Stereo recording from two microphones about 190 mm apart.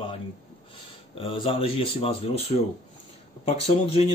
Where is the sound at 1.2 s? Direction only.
30° left (ahead or behind).